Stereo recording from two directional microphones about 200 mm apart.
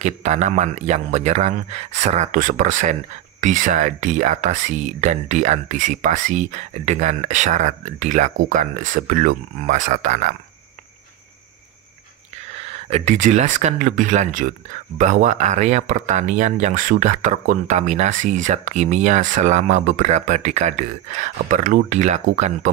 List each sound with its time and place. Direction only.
0.0 s speech: 35° right (ahead or behind)
12.5 s speech: 30° right (ahead or behind)